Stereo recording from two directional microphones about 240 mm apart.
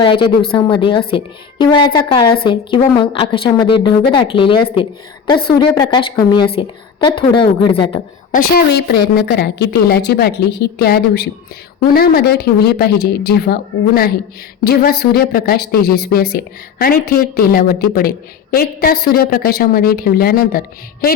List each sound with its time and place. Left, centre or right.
0.0 s a woman's voice: left
8.3 s speech: left